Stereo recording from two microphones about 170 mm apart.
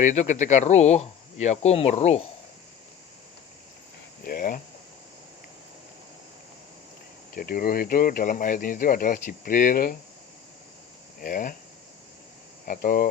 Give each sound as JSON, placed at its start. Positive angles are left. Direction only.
{"t": 0.0, "sound": "speech", "side_deg": 45}
{"t": 4.2, "sound": "speech", "side_deg": 55}
{"t": 7.3, "sound": "speech", "side_deg": 60}
{"t": 11.2, "sound": "speech", "side_deg": 55}
{"t": 12.6, "sound": "speech", "side_deg": 55}